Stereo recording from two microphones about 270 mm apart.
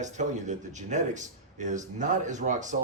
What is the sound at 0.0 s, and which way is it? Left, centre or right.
Speech, right.